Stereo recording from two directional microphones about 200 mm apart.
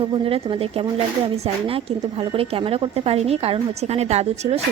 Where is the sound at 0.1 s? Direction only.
30° right (ahead or behind).